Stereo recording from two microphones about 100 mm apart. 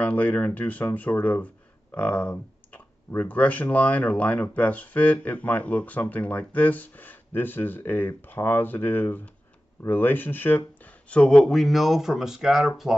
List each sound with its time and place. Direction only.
0.0 s speech: 15° left (ahead or behind); by 12.9 s 5° right (ahead or behind)